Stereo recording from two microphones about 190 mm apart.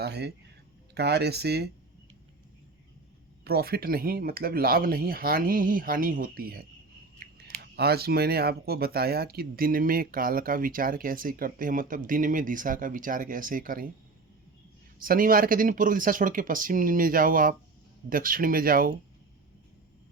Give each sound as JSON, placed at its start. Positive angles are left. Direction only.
{"t": 0.0, "sound": "speech", "side_deg": -60}
{"t": 3.4, "sound": "speech", "side_deg": -55}
{"t": 14.9, "sound": "speech", "side_deg": -50}